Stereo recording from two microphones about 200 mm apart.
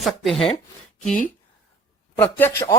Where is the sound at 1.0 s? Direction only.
40° left (ahead or behind).